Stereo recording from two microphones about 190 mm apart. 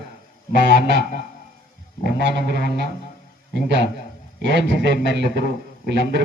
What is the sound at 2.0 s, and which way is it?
Speech, 60° right (ahead or behind).